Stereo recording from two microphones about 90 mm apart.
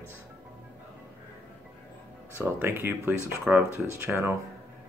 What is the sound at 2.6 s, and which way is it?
Speech, 25° right (ahead or behind).